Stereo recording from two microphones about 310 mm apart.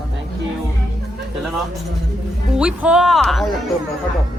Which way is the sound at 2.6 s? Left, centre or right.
Centre.